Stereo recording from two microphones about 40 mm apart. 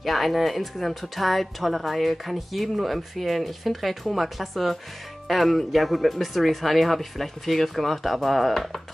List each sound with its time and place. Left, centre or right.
0.0 s speech: centre